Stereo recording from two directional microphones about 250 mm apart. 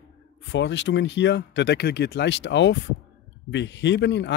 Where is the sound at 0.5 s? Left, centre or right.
Left.